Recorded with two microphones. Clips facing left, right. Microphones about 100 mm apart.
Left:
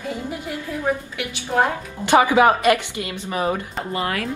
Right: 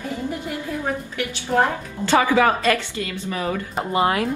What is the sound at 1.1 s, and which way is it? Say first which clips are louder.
Speech: right 1 dB; 10° left (ahead or behind).